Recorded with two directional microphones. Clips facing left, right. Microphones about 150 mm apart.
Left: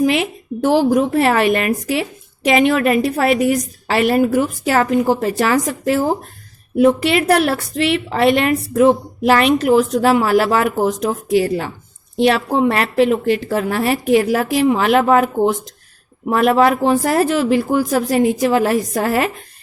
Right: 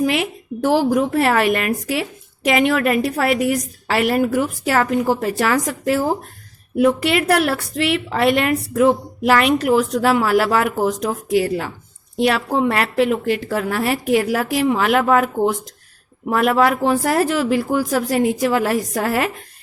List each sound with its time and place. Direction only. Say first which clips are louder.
0.0 s speech: left 3 dB; 25° left (ahead or behind)